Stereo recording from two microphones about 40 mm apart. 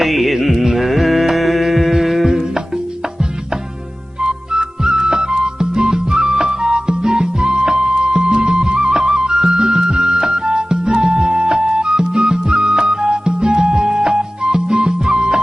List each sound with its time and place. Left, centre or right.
0.0 s music: centre
4.2 s music: centre